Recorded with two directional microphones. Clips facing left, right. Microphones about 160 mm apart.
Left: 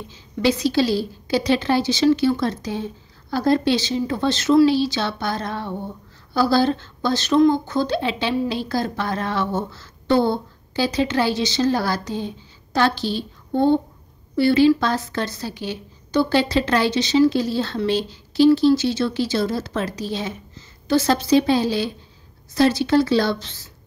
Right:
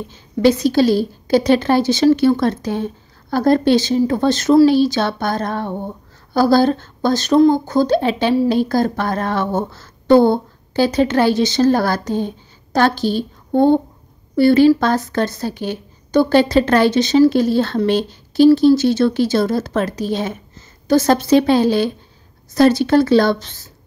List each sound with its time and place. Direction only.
0.1 s a woman's voice: 50° right (ahead or behind)